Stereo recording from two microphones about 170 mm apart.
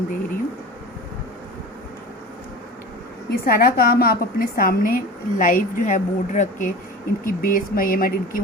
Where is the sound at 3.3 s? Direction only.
60° left (ahead or behind).